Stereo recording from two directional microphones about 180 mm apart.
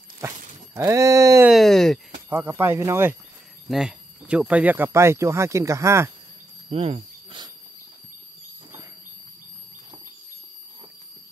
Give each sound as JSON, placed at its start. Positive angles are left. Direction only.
{"t": 0.7, "sound": "speech", "side_deg": -15}
{"t": 1.5, "sound": "a sound", "side_deg": 0}
{"t": 2.2, "sound": "speech", "side_deg": -15}
{"t": 3.6, "sound": "speech", "side_deg": -5}
{"t": 6.7, "sound": "cricket", "side_deg": -30}